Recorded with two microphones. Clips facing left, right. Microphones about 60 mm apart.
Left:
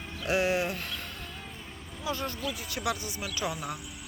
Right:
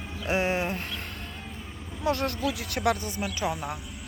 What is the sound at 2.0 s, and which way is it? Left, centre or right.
Speech, right.